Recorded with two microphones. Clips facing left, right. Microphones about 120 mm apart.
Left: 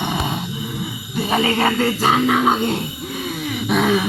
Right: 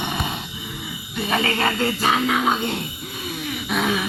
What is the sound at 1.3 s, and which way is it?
Speech, 25° left (ahead or behind).